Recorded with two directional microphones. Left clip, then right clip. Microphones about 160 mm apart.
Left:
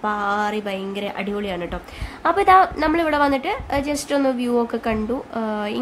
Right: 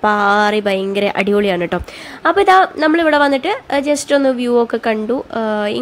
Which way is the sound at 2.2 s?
20° right (ahead or behind).